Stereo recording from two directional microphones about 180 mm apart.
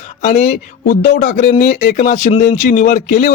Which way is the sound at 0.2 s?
40° left (ahead or behind).